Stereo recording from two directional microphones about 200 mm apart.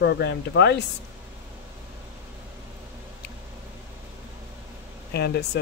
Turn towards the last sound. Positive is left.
turn(degrees=55)  # may be behind; listen again after turning